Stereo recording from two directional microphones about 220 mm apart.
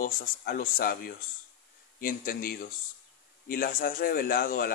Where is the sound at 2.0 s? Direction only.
40° left (ahead or behind).